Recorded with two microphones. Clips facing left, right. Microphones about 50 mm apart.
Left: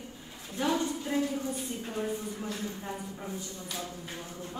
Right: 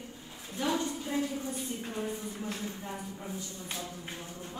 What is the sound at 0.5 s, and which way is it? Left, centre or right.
Speech, left.